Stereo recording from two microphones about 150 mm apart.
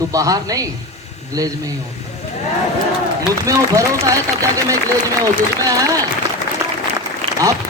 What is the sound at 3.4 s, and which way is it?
Speech, 20° right (ahead or behind).